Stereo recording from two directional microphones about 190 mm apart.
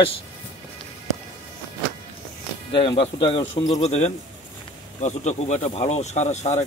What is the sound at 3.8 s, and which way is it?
Speech, 35° left (ahead or behind).